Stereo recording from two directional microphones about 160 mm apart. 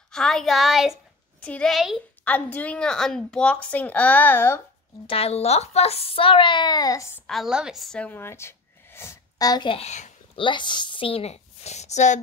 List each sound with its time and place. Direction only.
0.1 s speech: centre (ahead or behind)
2.2 s a woman's voice: 10° left (ahead or behind)
5.0 s a woman's voice: 40° left (ahead or behind); by 7.2 s 20° left (ahead or behind)
7.2 s a woman's voice: centre (ahead or behind); by 10.1 s 45° left (ahead or behind)
10.3 s a woman's voice: 30° left (ahead or behind); by 12.2 s 45° left (ahead or behind)